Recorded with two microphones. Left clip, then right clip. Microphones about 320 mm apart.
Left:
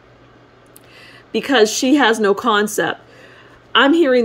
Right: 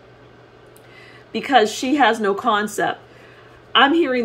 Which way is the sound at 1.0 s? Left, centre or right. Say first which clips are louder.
Left 5 dB; left.